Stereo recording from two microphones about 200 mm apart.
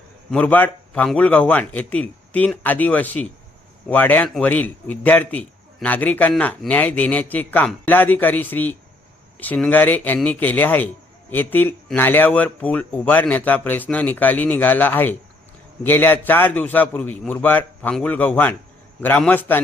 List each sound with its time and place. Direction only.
0.3 s a man's voice: 5° left (ahead or behind)